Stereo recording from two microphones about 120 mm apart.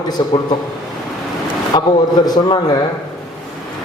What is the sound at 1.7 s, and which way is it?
A man's voice, 35° left (ahead or behind).